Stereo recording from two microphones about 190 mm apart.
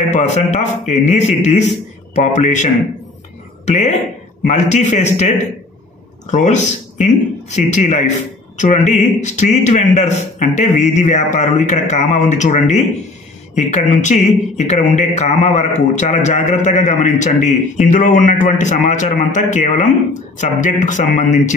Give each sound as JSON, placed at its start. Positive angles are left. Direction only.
{"t": 0.1, "sound": "a man's voice", "side_deg": 35}
{"t": 4.5, "sound": "a man's voice", "side_deg": 40}